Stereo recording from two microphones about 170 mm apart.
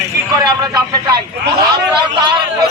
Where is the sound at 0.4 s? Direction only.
25° right (ahead or behind).